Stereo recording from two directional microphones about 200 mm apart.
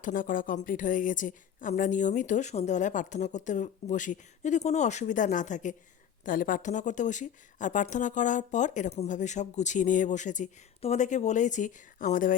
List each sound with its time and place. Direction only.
0.0 s a woman's voice: 45° left (ahead or behind)